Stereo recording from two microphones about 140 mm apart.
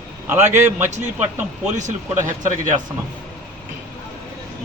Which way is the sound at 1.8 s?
65° right (ahead or behind).